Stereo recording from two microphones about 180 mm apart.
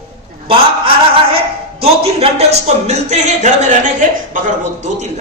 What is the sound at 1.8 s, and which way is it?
A man's voice, 35° right (ahead or behind).